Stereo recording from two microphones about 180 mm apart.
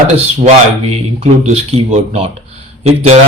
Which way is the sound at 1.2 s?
35° right (ahead or behind).